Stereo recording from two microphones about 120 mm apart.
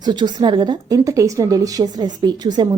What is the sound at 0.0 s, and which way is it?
A woman's voice, 40° right (ahead or behind).